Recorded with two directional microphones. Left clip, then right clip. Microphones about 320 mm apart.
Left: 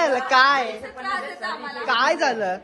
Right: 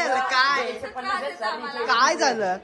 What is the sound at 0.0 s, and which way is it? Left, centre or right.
A woman's voice, centre.